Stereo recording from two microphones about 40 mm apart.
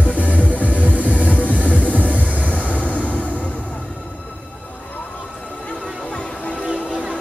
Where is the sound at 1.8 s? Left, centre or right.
Left.